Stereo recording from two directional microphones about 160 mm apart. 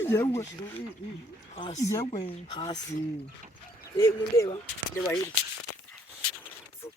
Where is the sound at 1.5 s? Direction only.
40° left (ahead or behind).